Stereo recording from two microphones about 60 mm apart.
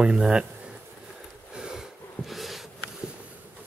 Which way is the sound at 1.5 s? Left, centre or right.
Centre.